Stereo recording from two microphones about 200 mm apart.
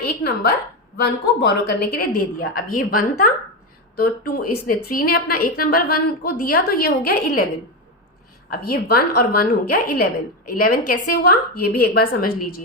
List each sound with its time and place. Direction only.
0.9 s a woman's voice: 55° left (ahead or behind)
8.4 s a woman's voice: 50° left (ahead or behind)